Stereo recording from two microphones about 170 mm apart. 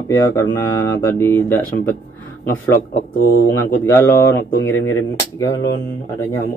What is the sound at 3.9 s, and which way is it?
Speech, 15° left (ahead or behind).